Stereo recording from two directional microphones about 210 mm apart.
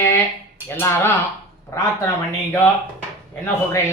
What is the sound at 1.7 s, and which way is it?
Mantra, 15° left (ahead or behind).